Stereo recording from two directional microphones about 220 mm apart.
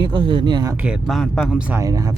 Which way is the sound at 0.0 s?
20° right (ahead or behind).